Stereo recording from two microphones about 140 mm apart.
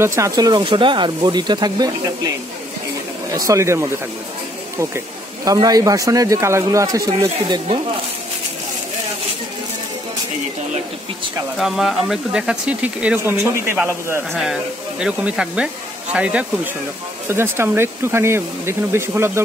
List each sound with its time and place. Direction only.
0.0 s speech: 20° right (ahead or behind)
11.5 s speech: centre (ahead or behind); by 14.2 s 15° right (ahead or behind)
14.3 s speech: centre (ahead or behind); by 19.4 s 20° right (ahead or behind)